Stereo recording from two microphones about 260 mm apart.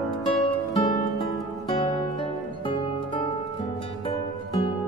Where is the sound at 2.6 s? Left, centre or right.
Centre.